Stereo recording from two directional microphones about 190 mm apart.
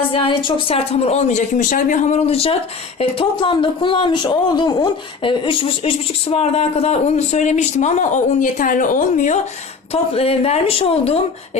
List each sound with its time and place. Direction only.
0.1 s speech: 25° left (ahead or behind)